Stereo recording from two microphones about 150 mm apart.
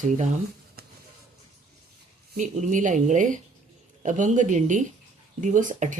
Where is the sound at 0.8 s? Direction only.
90° right.